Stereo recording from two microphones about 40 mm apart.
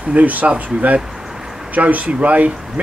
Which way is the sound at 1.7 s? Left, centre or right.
Right.